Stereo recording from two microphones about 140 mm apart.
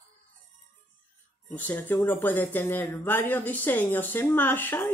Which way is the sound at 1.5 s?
10° left (ahead or behind).